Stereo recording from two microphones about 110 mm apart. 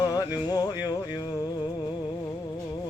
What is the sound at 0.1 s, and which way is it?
Music, 35° left (ahead or behind).